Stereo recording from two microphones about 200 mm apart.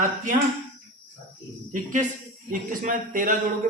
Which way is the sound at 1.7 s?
40° right (ahead or behind).